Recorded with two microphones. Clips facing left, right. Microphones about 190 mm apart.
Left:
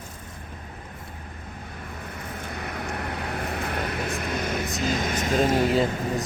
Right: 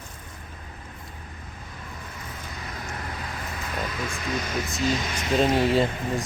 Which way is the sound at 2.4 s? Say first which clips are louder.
Left 6 dB; 60° left (ahead or behind).